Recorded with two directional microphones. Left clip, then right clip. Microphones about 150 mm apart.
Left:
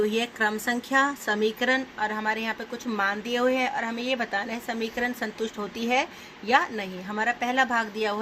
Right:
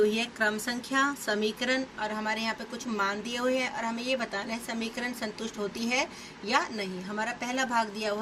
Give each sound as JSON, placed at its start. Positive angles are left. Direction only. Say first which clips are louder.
{"t": 0.1, "sound": "a woman's voice", "louder": "left 3 dB", "side_deg": 65}